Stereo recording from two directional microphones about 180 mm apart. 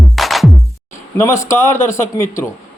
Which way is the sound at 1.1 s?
15° left (ahead or behind).